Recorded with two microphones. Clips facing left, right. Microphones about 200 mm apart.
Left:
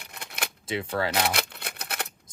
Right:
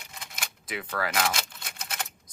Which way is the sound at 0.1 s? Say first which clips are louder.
Left 3 dB; 65° left (ahead or behind).